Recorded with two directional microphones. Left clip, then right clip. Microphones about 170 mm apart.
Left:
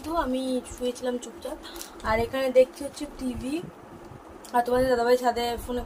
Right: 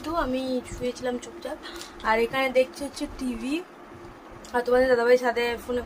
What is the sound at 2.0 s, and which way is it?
Speech, 25° right (ahead or behind).